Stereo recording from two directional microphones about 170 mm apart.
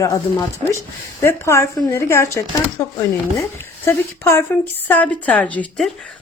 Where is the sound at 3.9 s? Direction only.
15° left (ahead or behind).